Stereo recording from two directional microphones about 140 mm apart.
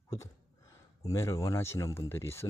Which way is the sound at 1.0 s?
25° left (ahead or behind).